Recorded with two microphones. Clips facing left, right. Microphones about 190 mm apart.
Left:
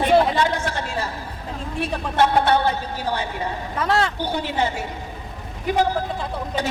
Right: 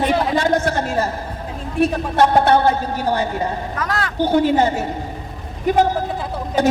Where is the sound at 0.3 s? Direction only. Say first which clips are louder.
Right 5 dB; 45° right (ahead or behind).